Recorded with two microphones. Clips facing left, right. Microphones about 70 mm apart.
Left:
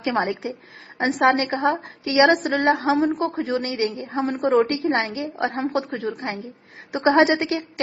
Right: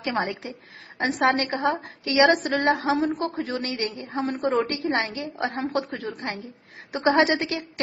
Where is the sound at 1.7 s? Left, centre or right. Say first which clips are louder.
Left 3 dB; centre; by 4.1 s left.